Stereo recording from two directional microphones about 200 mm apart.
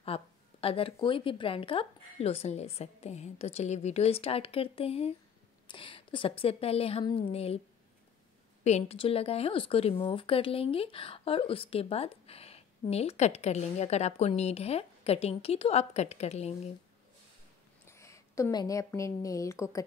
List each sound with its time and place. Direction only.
0.0 s a sound: 30° left (ahead or behind)
1.0 s speech: 25° left (ahead or behind)
8.6 s speech: 30° left (ahead or behind)
17.8 s a woman's voice: 15° left (ahead or behind)